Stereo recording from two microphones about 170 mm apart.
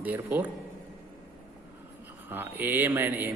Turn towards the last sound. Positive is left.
turn(degrees=-10)  # may be behind; listen again after turning